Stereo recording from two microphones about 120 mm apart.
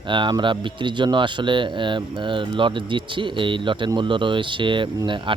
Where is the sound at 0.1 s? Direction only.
40° right (ahead or behind).